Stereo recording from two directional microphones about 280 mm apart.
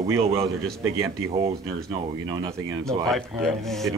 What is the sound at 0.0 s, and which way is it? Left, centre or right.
Speech, centre.